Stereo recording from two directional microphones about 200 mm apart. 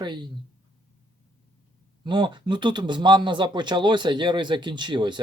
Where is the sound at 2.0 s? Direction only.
25° right (ahead or behind).